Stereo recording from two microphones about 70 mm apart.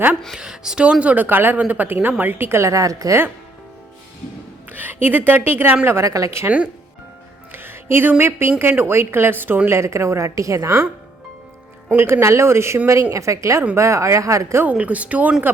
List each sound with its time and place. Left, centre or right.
0.3 s a woman's voice: centre; by 3.2 s right
4.7 s a woman's voice: right
6.1 s a woman's voice: right
7.5 s music: right
8.2 s speech: right
9.6 s a woman's voice: right
11.9 s a woman's voice: right
14.6 s a woman's voice: right